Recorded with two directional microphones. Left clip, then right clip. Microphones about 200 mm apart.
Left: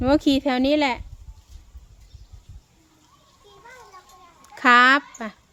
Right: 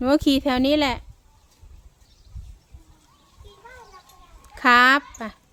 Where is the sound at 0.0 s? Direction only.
5° right (ahead or behind).